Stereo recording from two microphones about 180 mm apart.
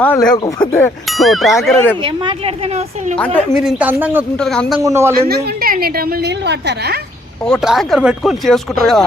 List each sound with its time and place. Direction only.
0.0 s a woman's voice: 10° left (ahead or behind)
0.3 s speech: 25° left (ahead or behind)
1.1 s a woman's voice: centre (ahead or behind)
2.0 s a woman's voice: 30° right (ahead or behind)
3.2 s a woman's voice: 10° left (ahead or behind)
3.6 s speech: 5° right (ahead or behind)
4.4 s speech: 5° left (ahead or behind)
4.8 s speech: 15° right (ahead or behind)
5.1 s a woman's voice: 55° right (ahead or behind)
7.4 s speech: centre (ahead or behind)